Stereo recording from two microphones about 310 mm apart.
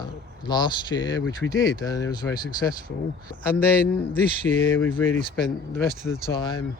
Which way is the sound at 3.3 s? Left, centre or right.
Left.